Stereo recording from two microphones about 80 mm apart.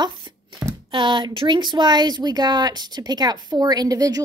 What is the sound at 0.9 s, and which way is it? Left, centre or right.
A woman's voice, right.